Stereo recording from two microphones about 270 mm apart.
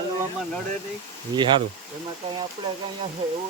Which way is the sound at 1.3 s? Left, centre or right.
Centre.